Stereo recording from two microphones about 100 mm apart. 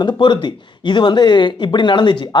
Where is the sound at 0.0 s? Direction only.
50° left (ahead or behind).